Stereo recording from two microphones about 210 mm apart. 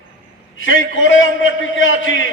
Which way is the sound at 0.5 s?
65° left (ahead or behind).